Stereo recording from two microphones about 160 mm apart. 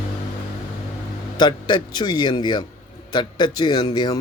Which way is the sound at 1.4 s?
30° left (ahead or behind).